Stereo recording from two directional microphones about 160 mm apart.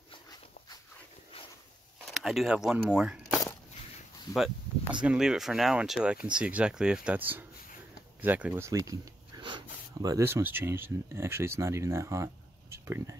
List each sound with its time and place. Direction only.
2.1 s speech: centre (ahead or behind)
5.0 s speech: 5° right (ahead or behind)